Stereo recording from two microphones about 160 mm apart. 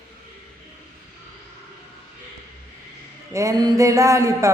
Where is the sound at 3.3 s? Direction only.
20° right (ahead or behind).